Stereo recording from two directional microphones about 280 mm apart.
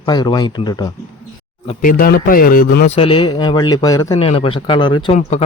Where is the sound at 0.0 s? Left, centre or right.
Centre.